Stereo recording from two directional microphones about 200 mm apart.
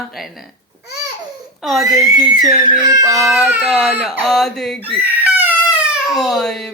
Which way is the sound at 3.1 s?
Centre (ahead or behind).